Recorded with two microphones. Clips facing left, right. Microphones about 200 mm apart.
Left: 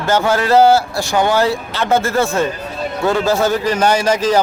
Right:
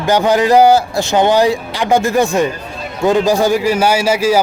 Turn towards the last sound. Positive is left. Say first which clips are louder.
# right 1 dB
turn(degrees=-10)  # may be behind; listen again after turning